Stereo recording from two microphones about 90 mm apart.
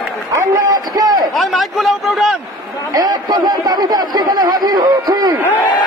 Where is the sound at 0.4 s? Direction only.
45° right (ahead or behind).